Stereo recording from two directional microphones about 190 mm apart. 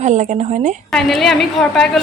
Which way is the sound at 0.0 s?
40° right (ahead or behind).